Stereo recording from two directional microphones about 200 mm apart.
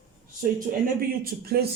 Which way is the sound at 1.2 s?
50° right (ahead or behind).